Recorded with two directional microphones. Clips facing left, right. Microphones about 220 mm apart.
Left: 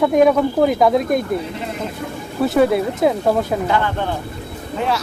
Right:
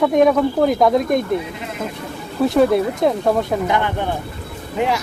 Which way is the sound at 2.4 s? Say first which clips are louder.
Right 1 dB; centre (ahead or behind).